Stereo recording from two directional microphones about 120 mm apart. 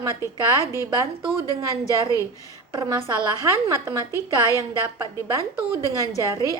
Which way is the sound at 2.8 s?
25° right (ahead or behind).